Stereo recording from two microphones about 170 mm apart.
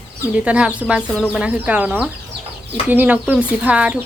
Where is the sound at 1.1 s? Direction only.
10° left (ahead or behind).